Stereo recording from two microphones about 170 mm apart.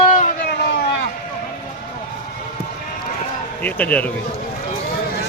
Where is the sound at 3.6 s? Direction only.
10° left (ahead or behind).